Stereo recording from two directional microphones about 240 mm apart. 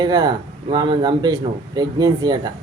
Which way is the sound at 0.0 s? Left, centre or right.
Centre.